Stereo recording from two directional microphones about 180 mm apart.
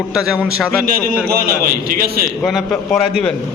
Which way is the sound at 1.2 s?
55° right (ahead or behind).